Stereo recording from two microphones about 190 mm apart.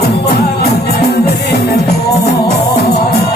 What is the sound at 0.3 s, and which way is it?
Music, 55° left (ahead or behind).